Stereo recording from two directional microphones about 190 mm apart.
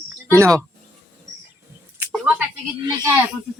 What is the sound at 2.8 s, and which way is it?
Speech, 20° right (ahead or behind).